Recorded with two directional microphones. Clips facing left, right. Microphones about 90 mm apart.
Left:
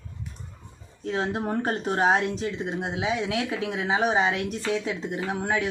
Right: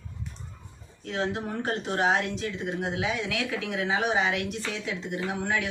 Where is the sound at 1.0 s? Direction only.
35° left (ahead or behind).